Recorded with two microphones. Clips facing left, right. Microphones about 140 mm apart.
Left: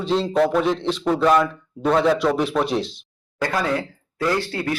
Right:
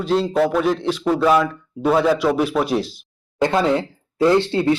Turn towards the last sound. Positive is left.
turn(degrees=-25)  # may be behind; listen again after turning